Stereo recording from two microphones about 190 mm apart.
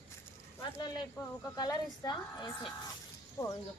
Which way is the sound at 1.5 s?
20° left (ahead or behind).